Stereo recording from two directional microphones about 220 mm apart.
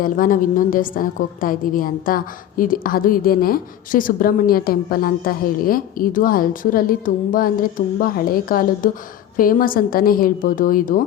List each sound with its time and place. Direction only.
0.0 s a woman's voice: 40° left (ahead or behind)